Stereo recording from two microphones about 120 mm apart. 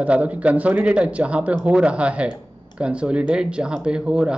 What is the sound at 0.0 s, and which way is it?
A man's voice, 10° right (ahead or behind).